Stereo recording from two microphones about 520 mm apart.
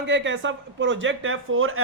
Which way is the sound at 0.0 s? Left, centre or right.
Centre.